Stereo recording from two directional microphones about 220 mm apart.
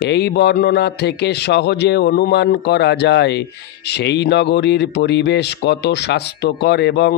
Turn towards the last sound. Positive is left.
turn(degrees=50)  # may be behind; listen again after turning